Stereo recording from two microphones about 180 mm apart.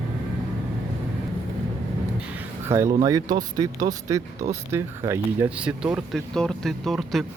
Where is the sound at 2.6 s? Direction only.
15° right (ahead or behind).